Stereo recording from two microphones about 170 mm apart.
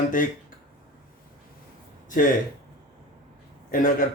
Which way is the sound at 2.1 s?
55° left (ahead or behind).